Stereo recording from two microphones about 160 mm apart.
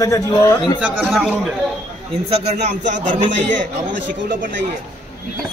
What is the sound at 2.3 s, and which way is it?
Speech, 45° right (ahead or behind).